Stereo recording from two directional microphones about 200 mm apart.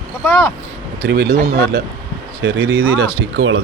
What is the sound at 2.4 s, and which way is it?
Speech, 60° right (ahead or behind).